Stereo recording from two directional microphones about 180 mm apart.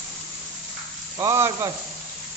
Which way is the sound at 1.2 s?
15° right (ahead or behind).